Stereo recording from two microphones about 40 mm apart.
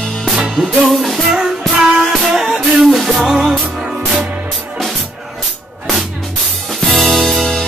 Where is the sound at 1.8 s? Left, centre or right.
Centre.